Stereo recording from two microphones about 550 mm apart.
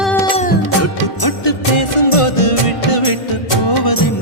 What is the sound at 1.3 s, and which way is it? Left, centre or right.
Music, left.